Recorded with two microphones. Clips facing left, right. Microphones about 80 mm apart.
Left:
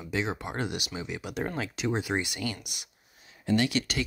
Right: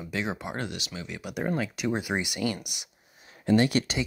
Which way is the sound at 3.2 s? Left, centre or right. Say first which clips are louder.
Right 5 dB; right.